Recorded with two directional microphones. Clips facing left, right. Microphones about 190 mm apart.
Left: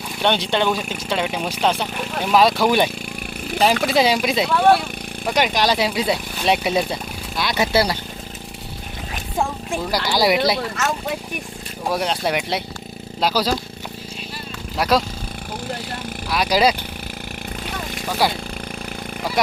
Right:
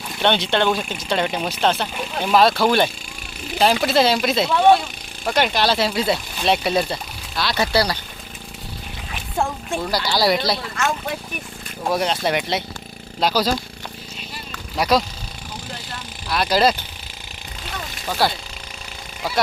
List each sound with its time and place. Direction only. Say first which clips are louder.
0.2 s speech: right 1 dB; 5° left (ahead or behind)
3.6 s speech: even; centre (ahead or behind)
3.8 s speech: even; 10° left (ahead or behind)
5.3 s speech: even; 15° left (ahead or behind)
9.9 s speech: left 1 dB; 15° left (ahead or behind)
11.9 s speech: right 1 dB; 5° left (ahead or behind)
14.8 s speech: even; 5° left (ahead or behind)
16.3 s speech: even; 10° left (ahead or behind)
18.2 s speech: even; 15° left (ahead or behind)